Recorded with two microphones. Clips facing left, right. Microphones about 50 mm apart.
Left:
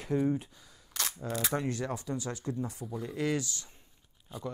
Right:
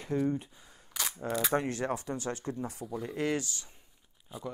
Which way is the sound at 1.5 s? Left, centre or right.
Right.